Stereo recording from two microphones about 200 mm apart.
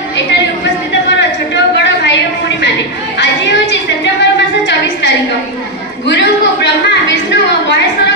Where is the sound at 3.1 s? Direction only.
60° left (ahead or behind).